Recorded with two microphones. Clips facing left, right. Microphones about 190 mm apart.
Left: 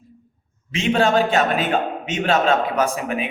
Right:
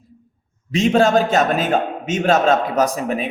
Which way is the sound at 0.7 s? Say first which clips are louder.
Right 4 dB; 40° right (ahead or behind).